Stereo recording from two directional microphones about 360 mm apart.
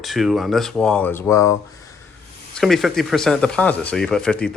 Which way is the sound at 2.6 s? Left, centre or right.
Centre.